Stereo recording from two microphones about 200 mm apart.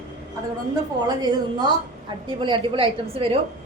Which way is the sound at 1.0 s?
20° right (ahead or behind).